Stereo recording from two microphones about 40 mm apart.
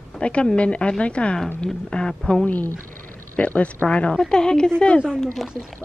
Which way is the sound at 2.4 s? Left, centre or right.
Left.